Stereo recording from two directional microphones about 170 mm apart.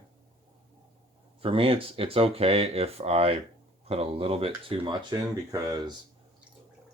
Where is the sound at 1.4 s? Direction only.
30° right (ahead or behind).